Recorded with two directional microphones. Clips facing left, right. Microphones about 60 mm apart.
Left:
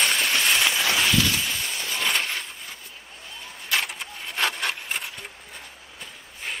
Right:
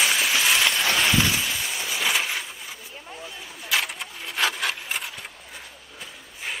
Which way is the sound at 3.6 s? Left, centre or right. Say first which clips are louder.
Right 1 dB; centre.